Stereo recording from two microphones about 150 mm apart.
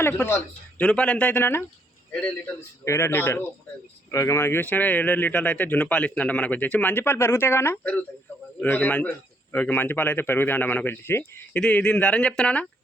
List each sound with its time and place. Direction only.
0.0 s speech: 15° left (ahead or behind)
2.8 s speech: 20° left (ahead or behind)